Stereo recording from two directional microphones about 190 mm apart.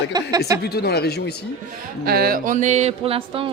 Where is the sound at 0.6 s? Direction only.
55° left (ahead or behind).